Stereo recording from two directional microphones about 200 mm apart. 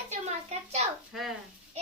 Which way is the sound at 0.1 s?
35° right (ahead or behind).